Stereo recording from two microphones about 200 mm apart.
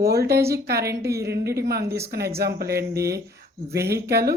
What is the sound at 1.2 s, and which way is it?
A woman's voice, 55° right (ahead or behind).